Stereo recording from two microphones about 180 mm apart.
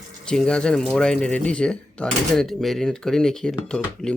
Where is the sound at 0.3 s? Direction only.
5° left (ahead or behind).